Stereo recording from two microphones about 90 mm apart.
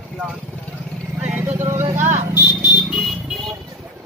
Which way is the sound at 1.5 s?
30° right (ahead or behind).